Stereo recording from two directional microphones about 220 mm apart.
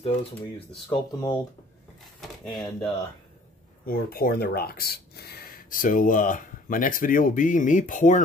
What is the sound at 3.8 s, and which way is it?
Speech, 40° left (ahead or behind).